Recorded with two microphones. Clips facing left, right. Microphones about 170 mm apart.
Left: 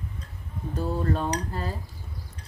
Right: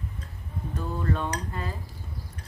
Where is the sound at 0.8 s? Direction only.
35° left (ahead or behind).